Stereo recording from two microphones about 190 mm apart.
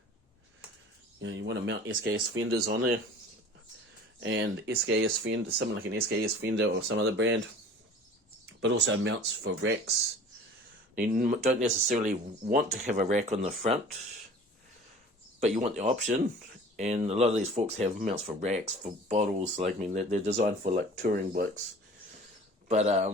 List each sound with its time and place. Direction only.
1.2 s speech: 75° right (ahead or behind); by 3.0 s 60° right (ahead or behind)
4.2 s speech: 85° right
4.9 s speech: 70° right (ahead or behind)
8.6 s speech: 70° right (ahead or behind)
10.9 s speech: 45° right (ahead or behind)
15.4 s speech: 35° right (ahead or behind)
20.7 s speech: 50° right (ahead or behind)
22.7 s speech: 35° right (ahead or behind)